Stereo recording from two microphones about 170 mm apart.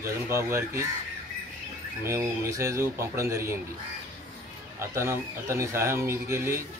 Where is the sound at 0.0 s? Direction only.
15° right (ahead or behind).